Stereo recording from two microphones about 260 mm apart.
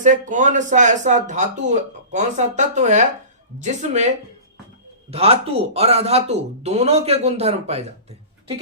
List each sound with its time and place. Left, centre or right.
0.0 s speech: right
5.1 s speech: right